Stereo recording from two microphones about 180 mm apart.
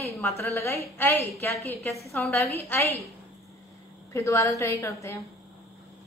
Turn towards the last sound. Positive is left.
turn(degrees=15)  # may be behind; listen again after turning